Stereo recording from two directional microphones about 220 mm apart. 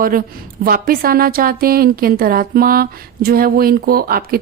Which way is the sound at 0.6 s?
40° right (ahead or behind).